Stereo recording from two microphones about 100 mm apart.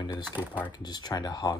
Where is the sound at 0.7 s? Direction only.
45° left (ahead or behind).